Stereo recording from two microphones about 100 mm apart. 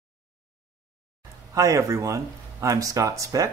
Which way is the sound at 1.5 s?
35° right (ahead or behind).